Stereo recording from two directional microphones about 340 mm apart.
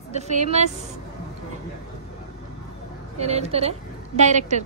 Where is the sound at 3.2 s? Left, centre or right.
Centre.